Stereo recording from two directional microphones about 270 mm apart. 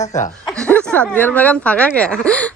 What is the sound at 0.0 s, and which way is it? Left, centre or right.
Speech, left.